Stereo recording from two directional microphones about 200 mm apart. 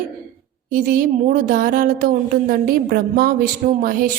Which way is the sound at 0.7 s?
45° right (ahead or behind).